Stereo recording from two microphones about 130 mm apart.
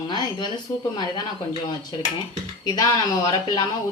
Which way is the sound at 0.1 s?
35° left (ahead or behind).